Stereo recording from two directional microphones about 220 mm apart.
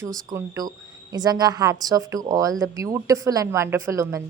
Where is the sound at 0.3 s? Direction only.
15° right (ahead or behind).